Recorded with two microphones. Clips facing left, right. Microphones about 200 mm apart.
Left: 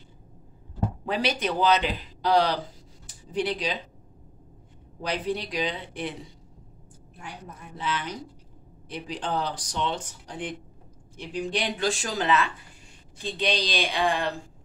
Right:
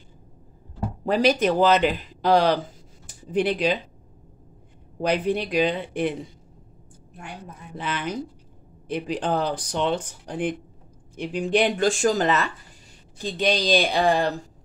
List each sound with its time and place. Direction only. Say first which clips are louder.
1.0 s a man's voice: right 8 dB; 45° right (ahead or behind)
5.0 s speech: right 6 dB; 55° right (ahead or behind)
7.2 s a man's voice: right 2 dB; 55° right (ahead or behind)